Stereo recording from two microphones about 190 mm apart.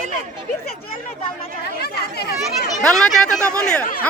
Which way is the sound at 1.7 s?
55° left (ahead or behind).